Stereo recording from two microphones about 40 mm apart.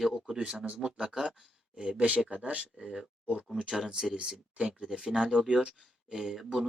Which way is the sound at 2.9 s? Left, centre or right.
Right.